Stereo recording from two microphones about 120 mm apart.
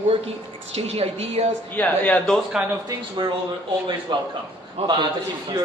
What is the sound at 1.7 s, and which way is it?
Speech, 10° left (ahead or behind).